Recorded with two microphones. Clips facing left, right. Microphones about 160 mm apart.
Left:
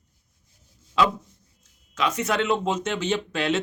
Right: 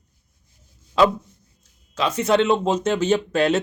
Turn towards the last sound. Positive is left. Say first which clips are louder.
# right 6 dB
turn(degrees=-45)  # may be behind; listen again after turning